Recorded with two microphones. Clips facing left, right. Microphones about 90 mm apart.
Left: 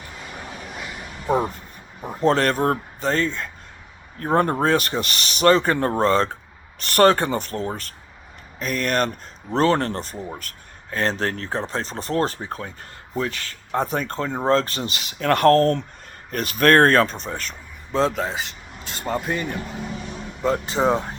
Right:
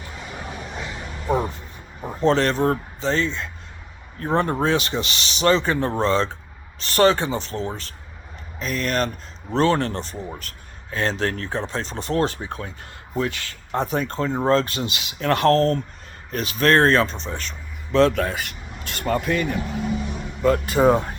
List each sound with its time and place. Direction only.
2.2 s speech: 45° left (ahead or behind)
18.1 s speech: 20° left (ahead or behind)